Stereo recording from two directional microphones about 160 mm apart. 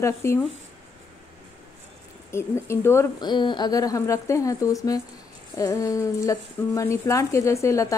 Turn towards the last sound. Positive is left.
turn(degrees=20)  # may be behind; listen again after turning